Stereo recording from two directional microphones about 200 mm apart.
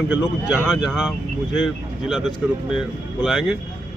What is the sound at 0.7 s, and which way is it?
A man's voice, centre (ahead or behind).